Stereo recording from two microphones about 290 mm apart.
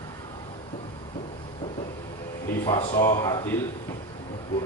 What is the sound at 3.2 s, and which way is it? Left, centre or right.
Speech, centre.